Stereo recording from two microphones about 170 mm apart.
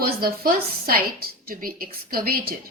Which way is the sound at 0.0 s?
60° right (ahead or behind).